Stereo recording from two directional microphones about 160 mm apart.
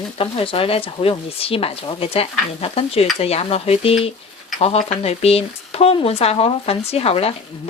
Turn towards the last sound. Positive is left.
turn(degrees=35)  # may be behind; listen again after turning